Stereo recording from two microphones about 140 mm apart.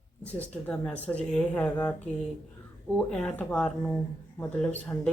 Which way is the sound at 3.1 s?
5° left (ahead or behind).